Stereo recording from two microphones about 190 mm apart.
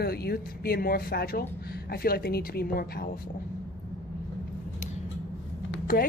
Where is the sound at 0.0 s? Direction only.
55° left (ahead or behind).